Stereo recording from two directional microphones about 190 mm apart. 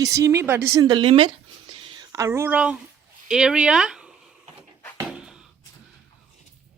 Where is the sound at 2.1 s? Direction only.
15° right (ahead or behind).